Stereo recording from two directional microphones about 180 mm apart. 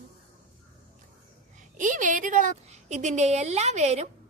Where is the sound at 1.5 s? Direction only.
45° right (ahead or behind).